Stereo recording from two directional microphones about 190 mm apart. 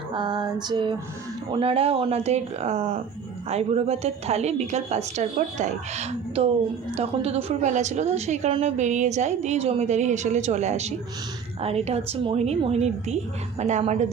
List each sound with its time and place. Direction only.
0.1 s female singing: 25° right (ahead or behind)
1.5 s a woman's voice: 30° right (ahead or behind)